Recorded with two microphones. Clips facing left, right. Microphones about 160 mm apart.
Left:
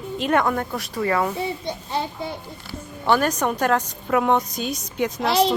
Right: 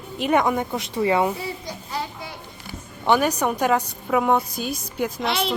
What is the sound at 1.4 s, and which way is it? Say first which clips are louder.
Child singing: left 4 dB; 25° left (ahead or behind).